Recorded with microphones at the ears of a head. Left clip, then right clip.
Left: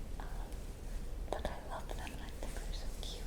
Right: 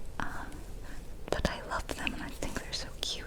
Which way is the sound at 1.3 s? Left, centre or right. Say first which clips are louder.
Right 9 dB; right.